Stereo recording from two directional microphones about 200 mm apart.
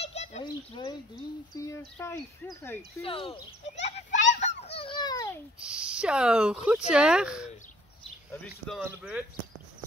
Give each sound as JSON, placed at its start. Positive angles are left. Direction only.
{"t": 0.0, "sound": "goat", "side_deg": 30}
{"t": 1.5, "sound": "speech", "side_deg": 15}
{"t": 3.0, "sound": "speech", "side_deg": 25}
{"t": 4.3, "sound": "fowl", "side_deg": 35}
{"t": 5.8, "sound": "speech", "side_deg": -5}
{"t": 8.3, "sound": "speech", "side_deg": 10}
{"t": 8.7, "sound": "speech", "side_deg": -5}